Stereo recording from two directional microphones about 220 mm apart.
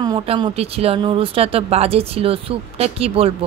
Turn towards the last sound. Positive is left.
turn(degrees=-25)  # may be behind; listen again after turning